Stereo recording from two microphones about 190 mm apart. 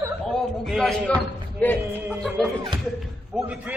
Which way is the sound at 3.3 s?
10° right (ahead or behind).